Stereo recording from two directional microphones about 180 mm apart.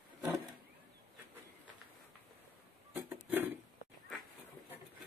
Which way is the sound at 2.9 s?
10° right (ahead or behind).